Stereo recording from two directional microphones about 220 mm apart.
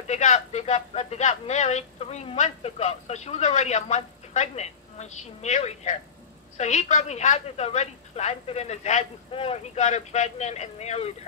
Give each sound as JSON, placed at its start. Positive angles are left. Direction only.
{"t": 0.1, "sound": "speech", "side_deg": 30}